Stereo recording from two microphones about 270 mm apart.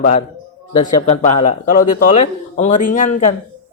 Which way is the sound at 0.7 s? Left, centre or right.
Centre.